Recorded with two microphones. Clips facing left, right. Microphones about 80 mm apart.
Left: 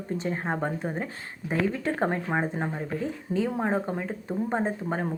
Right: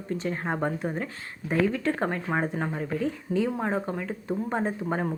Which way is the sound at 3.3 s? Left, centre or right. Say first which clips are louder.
Left 1 dB; centre.